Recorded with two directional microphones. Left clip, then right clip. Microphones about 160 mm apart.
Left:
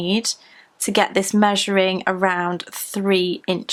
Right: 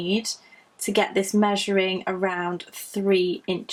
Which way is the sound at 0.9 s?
35° left (ahead or behind).